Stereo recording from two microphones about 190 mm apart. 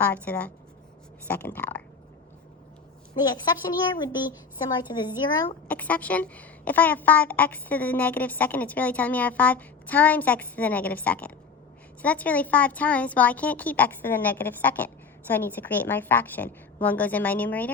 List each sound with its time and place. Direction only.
0.0 s a woman's voice: 10° left (ahead or behind)
3.2 s a woman's voice: 20° left (ahead or behind)
5.6 s a woman's voice: 10° left (ahead or behind)